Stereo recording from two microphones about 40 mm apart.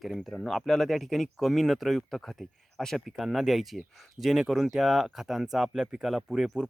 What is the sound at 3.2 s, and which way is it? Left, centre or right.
Speech, centre.